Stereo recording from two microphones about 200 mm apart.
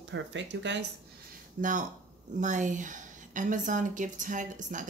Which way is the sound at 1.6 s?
40° right (ahead or behind).